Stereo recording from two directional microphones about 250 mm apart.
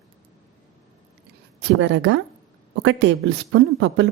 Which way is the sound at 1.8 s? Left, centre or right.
Right.